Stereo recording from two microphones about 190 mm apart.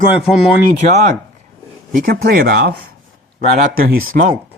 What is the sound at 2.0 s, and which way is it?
Speech, 50° right (ahead or behind).